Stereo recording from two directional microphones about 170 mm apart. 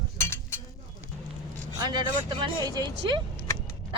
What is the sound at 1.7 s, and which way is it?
Speech, 25° right (ahead or behind).